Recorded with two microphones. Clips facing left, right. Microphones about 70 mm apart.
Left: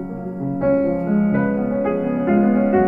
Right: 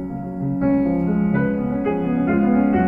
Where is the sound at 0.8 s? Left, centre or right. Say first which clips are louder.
Left 1 dB; left.